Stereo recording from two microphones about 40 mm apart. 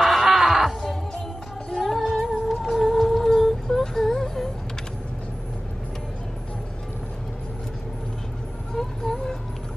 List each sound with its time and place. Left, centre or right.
0.0 s music: centre
0.7 s music: centre
1.8 s music: centre
8.7 s vehicle: centre